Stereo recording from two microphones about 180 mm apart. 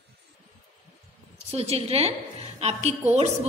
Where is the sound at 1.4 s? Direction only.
35° right (ahead or behind).